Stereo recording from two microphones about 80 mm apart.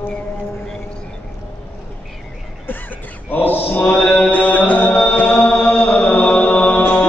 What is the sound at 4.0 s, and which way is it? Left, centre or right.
Music, centre.